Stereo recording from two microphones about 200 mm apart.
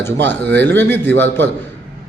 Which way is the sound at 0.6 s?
10° left (ahead or behind).